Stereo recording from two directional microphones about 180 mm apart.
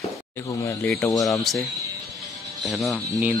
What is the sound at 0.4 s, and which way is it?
Speech, 15° left (ahead or behind).